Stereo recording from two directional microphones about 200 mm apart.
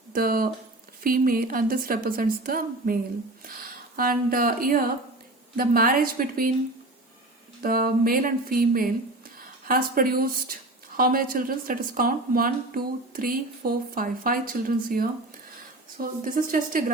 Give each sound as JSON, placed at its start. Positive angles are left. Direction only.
{"t": 0.1, "sound": "speech", "side_deg": -45}
{"t": 7.6, "sound": "a woman's voice", "side_deg": -45}